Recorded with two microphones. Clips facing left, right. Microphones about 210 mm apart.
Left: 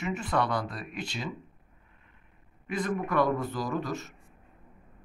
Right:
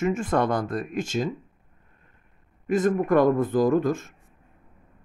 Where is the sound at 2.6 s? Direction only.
45° right (ahead or behind).